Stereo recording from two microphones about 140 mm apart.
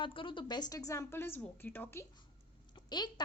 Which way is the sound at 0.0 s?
35° left (ahead or behind).